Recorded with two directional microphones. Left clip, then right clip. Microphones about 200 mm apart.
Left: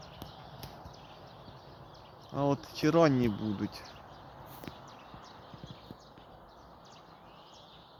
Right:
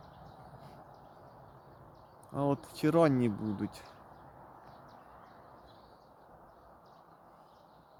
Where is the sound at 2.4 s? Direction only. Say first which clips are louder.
Left 2 dB; 20° right (ahead or behind).